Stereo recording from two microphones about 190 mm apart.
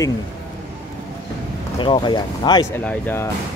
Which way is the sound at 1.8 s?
25° left (ahead or behind).